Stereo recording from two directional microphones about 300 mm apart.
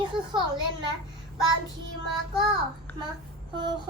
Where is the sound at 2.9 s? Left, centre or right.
Centre.